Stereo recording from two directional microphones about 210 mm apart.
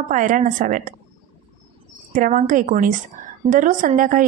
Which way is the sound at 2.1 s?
35° right (ahead or behind).